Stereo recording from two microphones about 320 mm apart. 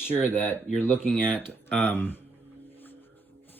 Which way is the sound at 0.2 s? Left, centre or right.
Centre.